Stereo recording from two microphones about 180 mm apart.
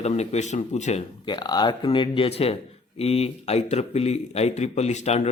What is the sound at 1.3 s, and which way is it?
A man's voice, 25° left (ahead or behind).